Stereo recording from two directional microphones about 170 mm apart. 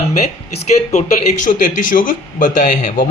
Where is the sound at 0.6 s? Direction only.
40° left (ahead or behind).